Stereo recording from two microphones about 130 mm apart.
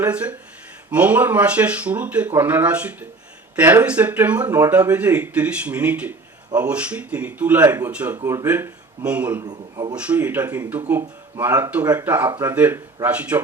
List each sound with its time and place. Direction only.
0.0 s speech: 10° right (ahead or behind)
8.2 s a man's voice: 20° right (ahead or behind)
9.4 s a man's voice: 30° right (ahead or behind)
9.9 s speech: 10° right (ahead or behind)